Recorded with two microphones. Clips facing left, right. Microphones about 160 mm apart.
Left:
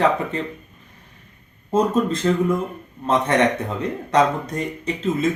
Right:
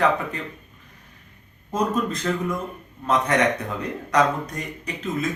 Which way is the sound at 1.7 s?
30° left (ahead or behind).